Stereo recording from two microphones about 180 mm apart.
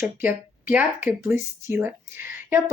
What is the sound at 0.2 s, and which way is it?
Speech, 10° right (ahead or behind).